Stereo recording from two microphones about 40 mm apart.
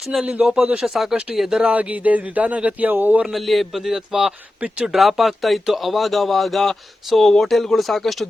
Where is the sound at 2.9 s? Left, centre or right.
Right.